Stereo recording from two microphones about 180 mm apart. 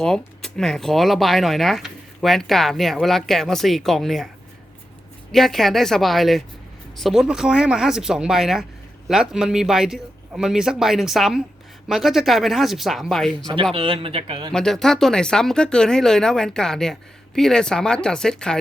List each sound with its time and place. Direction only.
0.0 s speech: 5° left (ahead or behind)
5.3 s speech: centre (ahead or behind)
13.7 s speech: 30° right (ahead or behind)
14.5 s speech: 5° left (ahead or behind)